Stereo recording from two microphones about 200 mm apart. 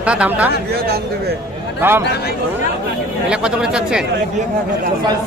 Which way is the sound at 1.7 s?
10° right (ahead or behind).